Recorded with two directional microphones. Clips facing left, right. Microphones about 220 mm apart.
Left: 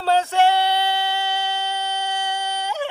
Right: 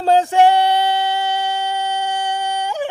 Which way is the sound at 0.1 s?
15° right (ahead or behind).